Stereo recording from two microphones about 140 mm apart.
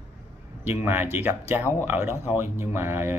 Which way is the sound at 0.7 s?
15° right (ahead or behind).